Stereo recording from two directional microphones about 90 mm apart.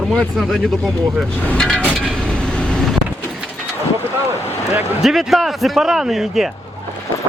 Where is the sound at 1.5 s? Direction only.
5° left (ahead or behind).